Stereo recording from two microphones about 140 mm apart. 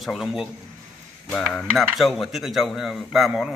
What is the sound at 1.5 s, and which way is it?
Speech, centre (ahead or behind).